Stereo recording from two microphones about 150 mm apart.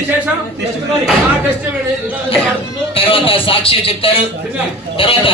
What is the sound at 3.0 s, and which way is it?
Speech, 35° left (ahead or behind).